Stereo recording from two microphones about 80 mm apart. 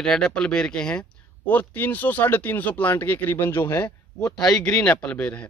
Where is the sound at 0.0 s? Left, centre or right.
Centre; by 3.9 s left.